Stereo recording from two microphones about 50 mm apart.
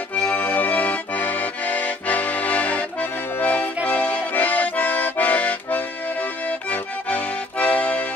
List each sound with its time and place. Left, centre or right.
0.1 s accordion: left